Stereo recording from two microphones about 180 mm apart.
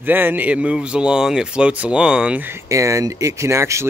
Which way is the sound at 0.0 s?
10° right (ahead or behind).